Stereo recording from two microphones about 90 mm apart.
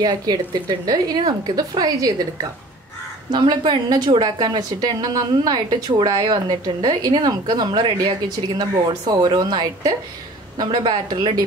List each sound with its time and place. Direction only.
0.0 s a woman's voice: 50° right (ahead or behind)
3.3 s a woman's voice: 55° right (ahead or behind)